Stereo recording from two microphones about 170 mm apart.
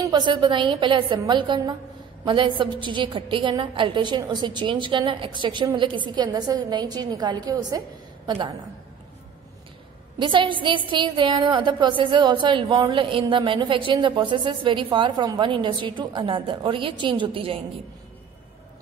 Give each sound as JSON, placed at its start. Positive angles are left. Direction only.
{"t": 0.0, "sound": "a woman's voice", "side_deg": -25}
{"t": 10.1, "sound": "a woman's voice", "side_deg": -30}